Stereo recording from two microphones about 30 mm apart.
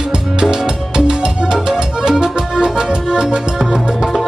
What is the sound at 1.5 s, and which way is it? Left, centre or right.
Music, right.